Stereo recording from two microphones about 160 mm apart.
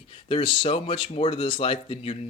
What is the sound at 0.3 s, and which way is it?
Speech, 35° left (ahead or behind).